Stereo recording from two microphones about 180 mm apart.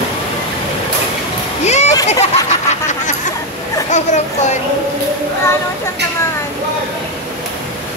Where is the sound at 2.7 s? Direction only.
40° left (ahead or behind).